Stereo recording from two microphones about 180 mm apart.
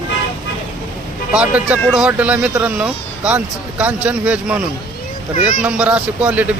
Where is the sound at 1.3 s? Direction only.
5° right (ahead or behind).